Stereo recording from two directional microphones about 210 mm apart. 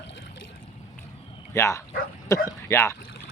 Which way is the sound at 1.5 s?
15° left (ahead or behind).